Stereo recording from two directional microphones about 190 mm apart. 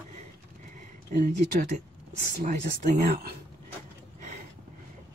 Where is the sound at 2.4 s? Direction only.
40° right (ahead or behind).